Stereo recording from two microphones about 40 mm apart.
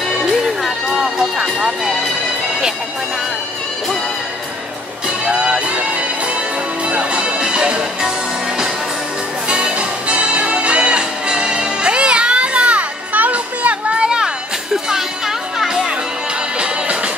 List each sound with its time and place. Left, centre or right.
0.6 s music: centre
0.9 s music: centre
5.0 s music: right
9.5 s music: right
13.9 s music: right